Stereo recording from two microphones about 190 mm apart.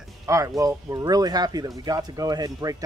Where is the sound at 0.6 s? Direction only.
15° right (ahead or behind).